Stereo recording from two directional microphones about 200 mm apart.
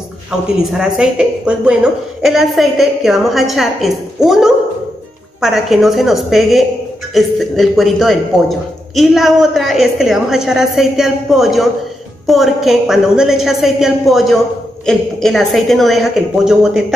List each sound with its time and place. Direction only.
0.7 s a man's voice: 5° right (ahead or behind)